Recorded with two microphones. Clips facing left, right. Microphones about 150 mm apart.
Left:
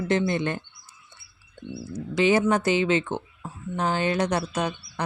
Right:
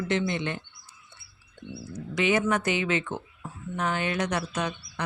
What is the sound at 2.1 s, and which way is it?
Speech, 30° left (ahead or behind).